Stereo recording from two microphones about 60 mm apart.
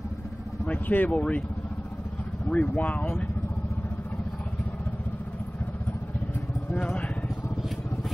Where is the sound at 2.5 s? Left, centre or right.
Left.